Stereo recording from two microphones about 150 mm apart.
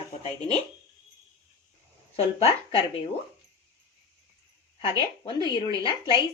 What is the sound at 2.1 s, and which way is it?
Speech, 40° left (ahead or behind).